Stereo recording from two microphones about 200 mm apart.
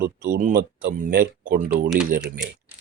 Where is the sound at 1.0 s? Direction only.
45° right (ahead or behind).